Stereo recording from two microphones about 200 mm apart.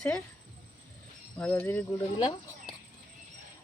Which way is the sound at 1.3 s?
5° left (ahead or behind).